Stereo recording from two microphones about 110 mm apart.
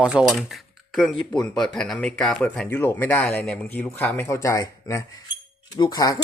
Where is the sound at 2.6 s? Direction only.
20° left (ahead or behind).